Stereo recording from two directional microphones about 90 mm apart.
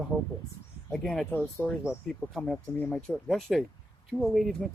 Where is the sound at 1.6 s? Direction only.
25° left (ahead or behind).